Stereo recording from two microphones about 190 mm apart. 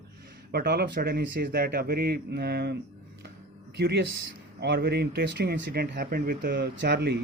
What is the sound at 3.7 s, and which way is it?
Speech, 65° right (ahead or behind).